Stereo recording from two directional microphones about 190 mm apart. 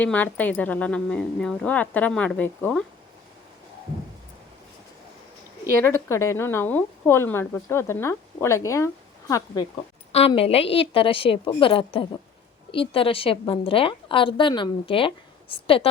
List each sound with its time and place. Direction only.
0.0 s a woman's voice: 10° left (ahead or behind)
5.8 s a woman's voice: 15° left (ahead or behind)
10.1 s a woman's voice: 30° left (ahead or behind)